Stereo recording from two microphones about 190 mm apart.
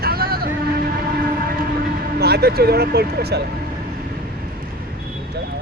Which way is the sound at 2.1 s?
55° right (ahead or behind).